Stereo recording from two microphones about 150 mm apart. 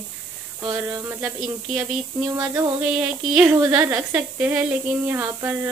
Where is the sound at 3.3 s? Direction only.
10° right (ahead or behind).